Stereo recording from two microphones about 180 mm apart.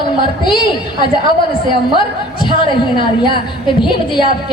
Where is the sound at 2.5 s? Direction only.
25° left (ahead or behind).